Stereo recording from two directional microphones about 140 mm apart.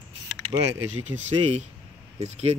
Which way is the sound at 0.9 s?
55° right (ahead or behind).